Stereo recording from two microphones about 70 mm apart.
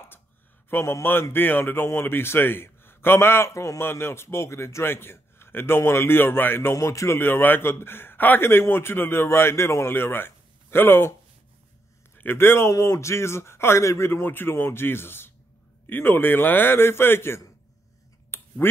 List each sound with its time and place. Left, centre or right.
0.7 s a man's voice: left
6.7 s speech: left
7.2 s a man's voice: left
12.2 s a man's voice: left
12.7 s a man's voice: left
18.6 s speech: left